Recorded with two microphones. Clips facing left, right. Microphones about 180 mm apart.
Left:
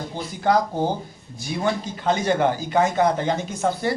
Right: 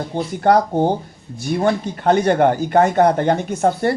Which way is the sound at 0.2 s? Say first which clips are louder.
Right 5 dB; 60° right (ahead or behind).